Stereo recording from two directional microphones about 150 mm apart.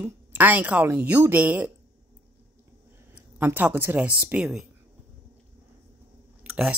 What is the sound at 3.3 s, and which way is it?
Speech, 15° right (ahead or behind).